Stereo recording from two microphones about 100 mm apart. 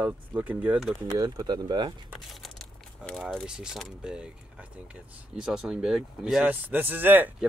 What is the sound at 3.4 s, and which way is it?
Speech, 5° right (ahead or behind).